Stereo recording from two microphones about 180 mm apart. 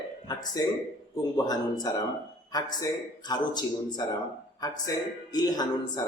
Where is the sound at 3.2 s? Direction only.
25° left (ahead or behind).